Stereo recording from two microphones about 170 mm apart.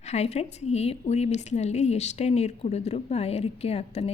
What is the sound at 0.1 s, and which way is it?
A woman's voice, 40° left (ahead or behind).